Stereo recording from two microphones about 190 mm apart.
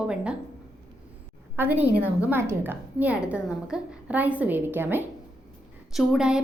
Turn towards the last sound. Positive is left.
turn(degrees=-5)  # may be behind; listen again after turning